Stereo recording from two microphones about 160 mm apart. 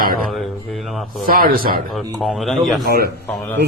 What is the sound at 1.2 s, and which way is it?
Speech, 65° right (ahead or behind).